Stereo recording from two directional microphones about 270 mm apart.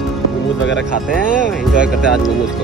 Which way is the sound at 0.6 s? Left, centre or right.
Left.